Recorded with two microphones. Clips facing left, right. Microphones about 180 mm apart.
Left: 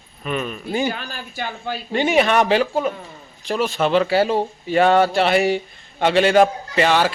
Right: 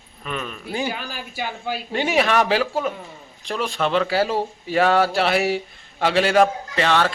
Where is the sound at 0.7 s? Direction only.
5° right (ahead or behind).